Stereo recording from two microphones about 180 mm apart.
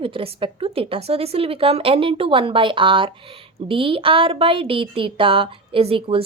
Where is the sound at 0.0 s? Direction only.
30° right (ahead or behind).